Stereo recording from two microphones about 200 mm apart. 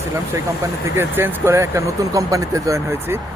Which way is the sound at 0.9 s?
10° right (ahead or behind).